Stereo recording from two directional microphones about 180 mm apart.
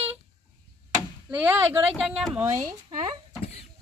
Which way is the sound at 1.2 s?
10° right (ahead or behind).